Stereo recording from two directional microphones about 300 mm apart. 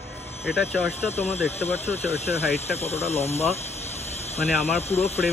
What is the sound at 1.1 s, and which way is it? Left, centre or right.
Speech, left.